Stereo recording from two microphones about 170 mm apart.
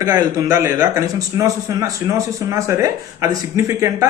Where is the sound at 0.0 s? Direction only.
20° right (ahead or behind).